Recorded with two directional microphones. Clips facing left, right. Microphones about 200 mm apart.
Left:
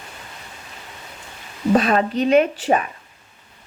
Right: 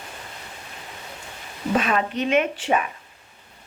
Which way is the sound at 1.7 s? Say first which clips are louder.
Left 5 dB; 35° left (ahead or behind).